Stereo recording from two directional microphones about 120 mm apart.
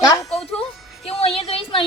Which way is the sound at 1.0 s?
55° left (ahead or behind).